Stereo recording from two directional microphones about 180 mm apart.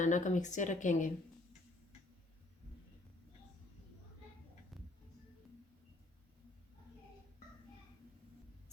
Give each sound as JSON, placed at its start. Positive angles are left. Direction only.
{"t": 0.0, "sound": "speech", "side_deg": 45}